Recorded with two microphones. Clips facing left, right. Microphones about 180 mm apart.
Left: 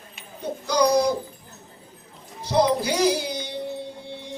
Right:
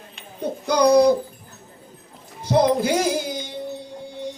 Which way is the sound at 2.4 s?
50° right (ahead or behind).